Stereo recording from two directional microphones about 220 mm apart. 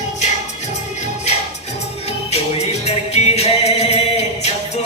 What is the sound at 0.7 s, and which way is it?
Music, 30° left (ahead or behind).